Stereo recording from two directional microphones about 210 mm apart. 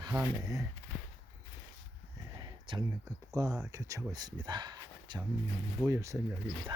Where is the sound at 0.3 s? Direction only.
15° right (ahead or behind).